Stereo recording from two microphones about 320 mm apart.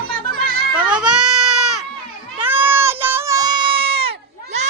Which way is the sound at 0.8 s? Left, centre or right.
Centre.